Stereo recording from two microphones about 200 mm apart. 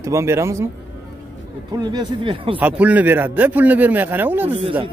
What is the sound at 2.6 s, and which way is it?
A man's voice, 5° right (ahead or behind).